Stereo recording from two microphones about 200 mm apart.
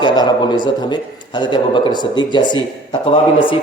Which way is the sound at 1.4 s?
25° left (ahead or behind).